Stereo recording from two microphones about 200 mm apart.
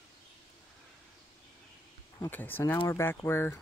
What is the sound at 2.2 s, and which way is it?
Speech, 10° left (ahead or behind).